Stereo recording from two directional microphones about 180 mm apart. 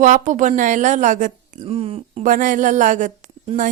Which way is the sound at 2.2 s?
45° right (ahead or behind).